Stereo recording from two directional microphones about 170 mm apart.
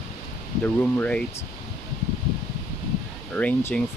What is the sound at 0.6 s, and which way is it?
Speech, 10° left (ahead or behind).